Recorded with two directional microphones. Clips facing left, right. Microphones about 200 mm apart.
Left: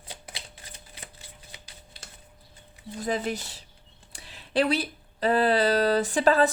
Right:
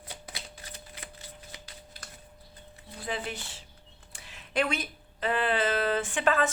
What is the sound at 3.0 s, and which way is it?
Speech, 40° left (ahead or behind).